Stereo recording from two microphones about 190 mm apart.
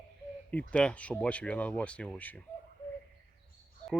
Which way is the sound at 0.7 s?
5° left (ahead or behind).